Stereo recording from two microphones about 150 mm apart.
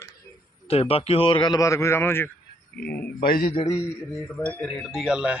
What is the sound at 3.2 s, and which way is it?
Speech, 80° left.